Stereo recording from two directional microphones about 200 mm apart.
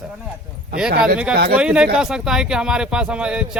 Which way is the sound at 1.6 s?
5° right (ahead or behind).